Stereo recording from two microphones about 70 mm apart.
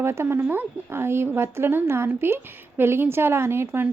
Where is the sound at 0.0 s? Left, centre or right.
Right.